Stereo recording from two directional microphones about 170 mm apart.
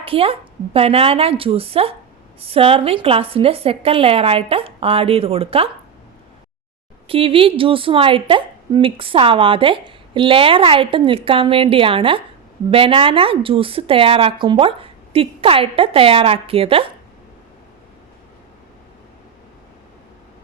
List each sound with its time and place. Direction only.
0.0 s a woman's voice: 35° right (ahead or behind)
7.1 s a woman's voice: 30° right (ahead or behind)